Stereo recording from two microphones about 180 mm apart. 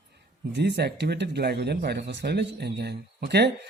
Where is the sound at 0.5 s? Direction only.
70° right (ahead or behind).